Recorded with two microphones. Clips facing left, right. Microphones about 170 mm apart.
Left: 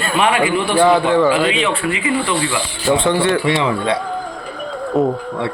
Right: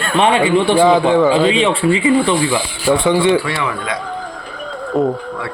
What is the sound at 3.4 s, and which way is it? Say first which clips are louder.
Speech: left 4 dB; 25° left (ahead or behind).